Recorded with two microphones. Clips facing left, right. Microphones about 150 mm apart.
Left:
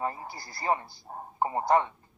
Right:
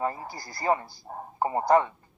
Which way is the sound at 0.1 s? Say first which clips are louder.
Right 2 dB; 40° right (ahead or behind).